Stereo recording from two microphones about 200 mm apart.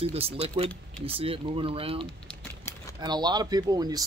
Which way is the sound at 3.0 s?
20° right (ahead or behind).